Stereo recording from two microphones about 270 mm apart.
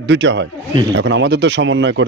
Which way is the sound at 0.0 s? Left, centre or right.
Right.